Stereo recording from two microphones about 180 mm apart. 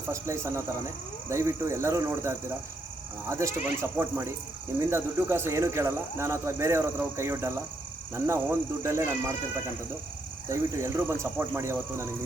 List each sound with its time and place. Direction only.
0.1 s speech: 15° right (ahead or behind)
10.5 s speech: 15° right (ahead or behind)